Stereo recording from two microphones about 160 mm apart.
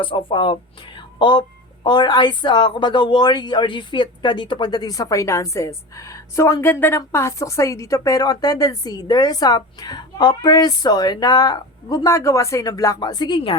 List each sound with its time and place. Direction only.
0.0 s a woman's voice: 30° left (ahead or behind)